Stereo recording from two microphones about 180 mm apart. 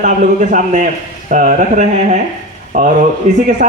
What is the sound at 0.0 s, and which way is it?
Speech, 45° right (ahead or behind).